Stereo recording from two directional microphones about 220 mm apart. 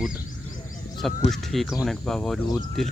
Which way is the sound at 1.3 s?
Centre (ahead or behind).